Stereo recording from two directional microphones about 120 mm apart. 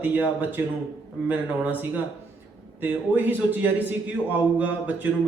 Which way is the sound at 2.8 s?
15° right (ahead or behind).